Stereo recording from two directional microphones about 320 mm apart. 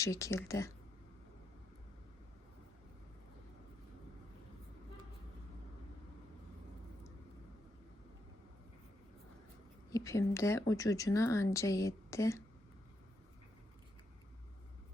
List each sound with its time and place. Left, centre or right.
0.0 s speech: centre
9.9 s speech: centre